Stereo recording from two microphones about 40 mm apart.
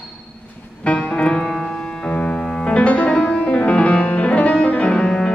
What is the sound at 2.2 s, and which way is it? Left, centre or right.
Music, left.